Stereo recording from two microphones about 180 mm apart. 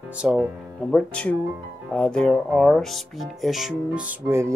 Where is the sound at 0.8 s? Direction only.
5° left (ahead or behind); by 4.5 s 10° right (ahead or behind).